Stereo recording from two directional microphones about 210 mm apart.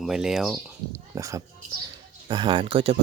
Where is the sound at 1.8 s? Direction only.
20° right (ahead or behind).